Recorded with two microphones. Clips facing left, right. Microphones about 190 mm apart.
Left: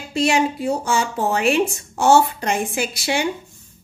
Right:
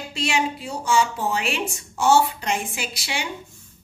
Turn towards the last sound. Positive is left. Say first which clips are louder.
# left 8 dB
turn(degrees=45)  # may be behind; listen again after turning